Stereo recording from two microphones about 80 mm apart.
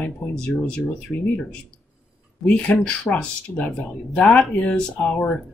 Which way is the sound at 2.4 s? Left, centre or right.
Centre.